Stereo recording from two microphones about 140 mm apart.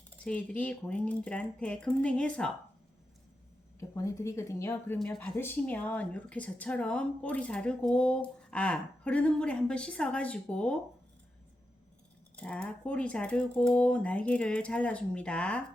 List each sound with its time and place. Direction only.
0.3 s speech: 10° left (ahead or behind)
3.8 s speech: 25° left (ahead or behind); by 10.8 s 5° left (ahead or behind)
12.4 s speech: 10° left (ahead or behind)